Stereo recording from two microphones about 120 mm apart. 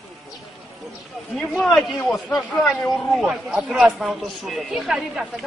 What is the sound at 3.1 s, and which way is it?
A man's voice, 5° right (ahead or behind).